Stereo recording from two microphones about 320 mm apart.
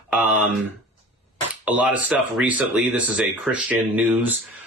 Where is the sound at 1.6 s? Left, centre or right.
Centre.